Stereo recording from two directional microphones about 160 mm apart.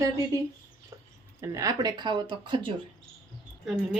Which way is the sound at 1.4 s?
20° right (ahead or behind).